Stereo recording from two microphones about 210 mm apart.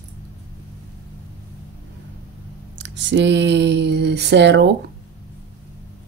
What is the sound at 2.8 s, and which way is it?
Speech, 60° right (ahead or behind).